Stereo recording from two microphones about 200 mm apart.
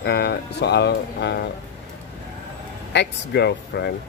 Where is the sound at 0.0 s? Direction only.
55° left (ahead or behind).